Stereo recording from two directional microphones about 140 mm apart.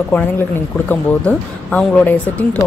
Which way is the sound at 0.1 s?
10° left (ahead or behind).